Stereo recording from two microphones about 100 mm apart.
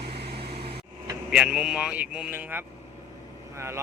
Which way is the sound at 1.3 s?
10° right (ahead or behind).